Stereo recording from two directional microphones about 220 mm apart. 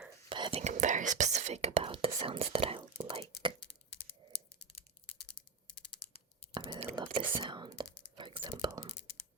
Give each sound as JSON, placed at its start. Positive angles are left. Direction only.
{"t": 0.3, "sound": "whispering", "side_deg": -20}
{"t": 6.5, "sound": "computer keyboard", "side_deg": -25}
{"t": 6.8, "sound": "whispering", "side_deg": -20}